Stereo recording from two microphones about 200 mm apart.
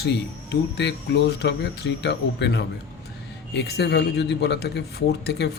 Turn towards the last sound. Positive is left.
turn(degrees=55)  # may be behind; listen again after turning